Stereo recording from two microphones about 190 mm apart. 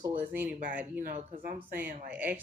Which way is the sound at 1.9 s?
50° right (ahead or behind).